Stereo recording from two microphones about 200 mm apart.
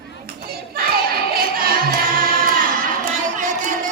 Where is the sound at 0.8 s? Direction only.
50° right (ahead or behind).